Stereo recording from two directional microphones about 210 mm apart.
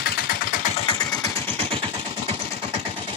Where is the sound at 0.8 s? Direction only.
20° left (ahead or behind).